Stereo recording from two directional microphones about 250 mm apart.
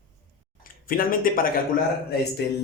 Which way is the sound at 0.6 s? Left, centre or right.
Left.